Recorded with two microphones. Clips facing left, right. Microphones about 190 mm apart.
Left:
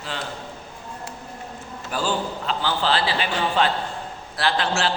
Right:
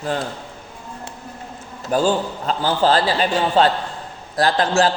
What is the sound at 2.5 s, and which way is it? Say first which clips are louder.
A man's voice: right 6 dB; 45° right (ahead or behind).